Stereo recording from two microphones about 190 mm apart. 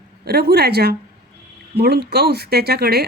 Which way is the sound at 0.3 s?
55° right (ahead or behind).